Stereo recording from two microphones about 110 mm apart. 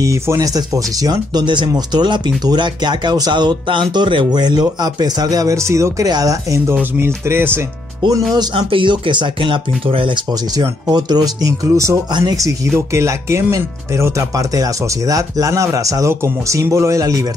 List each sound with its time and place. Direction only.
0.0 s speech: 30° right (ahead or behind)
6.7 s speech: 20° right (ahead or behind)
8.5 s speech: 55° right (ahead or behind); by 17.3 s 30° right (ahead or behind)